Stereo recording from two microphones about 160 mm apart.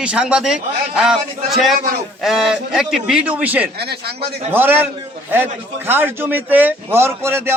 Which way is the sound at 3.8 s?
90° right.